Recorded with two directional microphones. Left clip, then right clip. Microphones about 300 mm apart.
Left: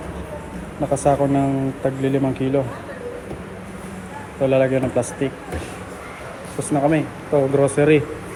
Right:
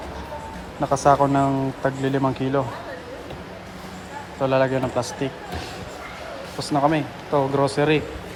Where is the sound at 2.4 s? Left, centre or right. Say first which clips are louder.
Left 3 dB; right.